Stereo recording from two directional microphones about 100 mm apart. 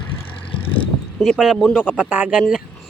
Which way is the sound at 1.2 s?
5° right (ahead or behind).